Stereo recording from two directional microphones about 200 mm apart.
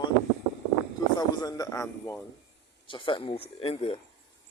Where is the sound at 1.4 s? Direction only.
20° left (ahead or behind).